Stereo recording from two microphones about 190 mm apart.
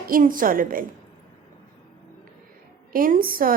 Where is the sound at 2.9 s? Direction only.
50° right (ahead or behind).